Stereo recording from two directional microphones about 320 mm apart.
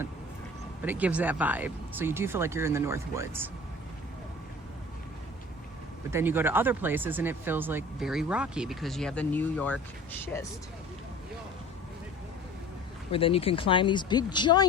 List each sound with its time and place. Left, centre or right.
0.8 s speech: centre
6.1 s speech: centre
13.1 s speech: centre